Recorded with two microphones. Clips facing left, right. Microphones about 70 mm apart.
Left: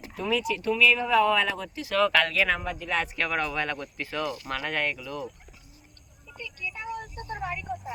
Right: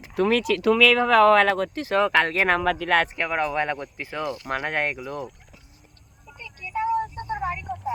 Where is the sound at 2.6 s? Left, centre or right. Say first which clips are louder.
Right 8 dB; right.